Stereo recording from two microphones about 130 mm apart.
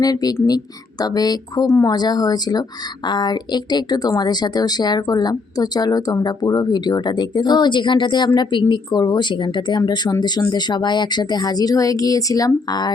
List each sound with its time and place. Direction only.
0.0 s speech: 30° left (ahead or behind)